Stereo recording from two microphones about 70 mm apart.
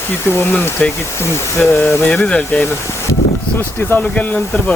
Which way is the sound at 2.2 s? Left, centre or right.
Centre.